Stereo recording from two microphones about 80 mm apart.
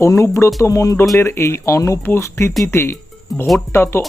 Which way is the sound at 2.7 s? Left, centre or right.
Left.